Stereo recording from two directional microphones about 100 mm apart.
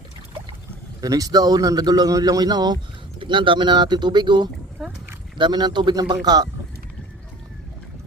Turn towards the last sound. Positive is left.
turn(degrees=-40)  # may be behind; listen again after turning